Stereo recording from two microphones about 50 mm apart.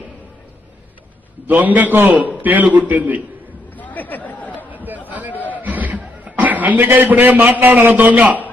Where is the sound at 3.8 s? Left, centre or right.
Left.